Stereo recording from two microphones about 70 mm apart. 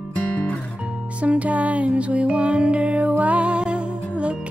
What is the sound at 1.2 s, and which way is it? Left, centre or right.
Music, centre.